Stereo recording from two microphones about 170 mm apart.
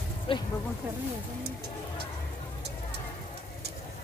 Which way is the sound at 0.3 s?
30° left (ahead or behind).